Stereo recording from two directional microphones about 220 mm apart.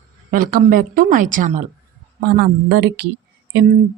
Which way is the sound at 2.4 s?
50° right (ahead or behind).